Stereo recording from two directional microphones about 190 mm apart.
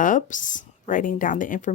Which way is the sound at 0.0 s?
45° left (ahead or behind).